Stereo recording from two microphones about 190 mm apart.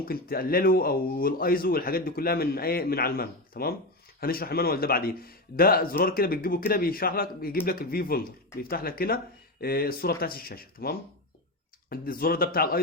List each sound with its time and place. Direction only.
0.0 s speech: 50° left (ahead or behind)